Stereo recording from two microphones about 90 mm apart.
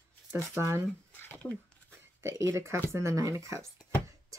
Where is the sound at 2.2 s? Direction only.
30° right (ahead or behind).